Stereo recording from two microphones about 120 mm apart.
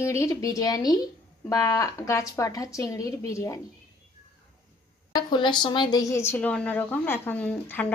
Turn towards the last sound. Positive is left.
turn(degrees=15)  # may be behind; listen again after turning